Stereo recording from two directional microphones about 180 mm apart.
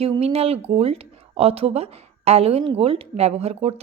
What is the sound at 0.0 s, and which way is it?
A woman's voice, 30° right (ahead or behind).